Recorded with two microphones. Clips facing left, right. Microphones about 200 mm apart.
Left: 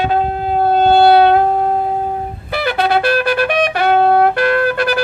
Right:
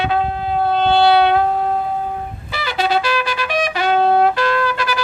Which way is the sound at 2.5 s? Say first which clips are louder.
Left 4 dB; 55° left (ahead or behind).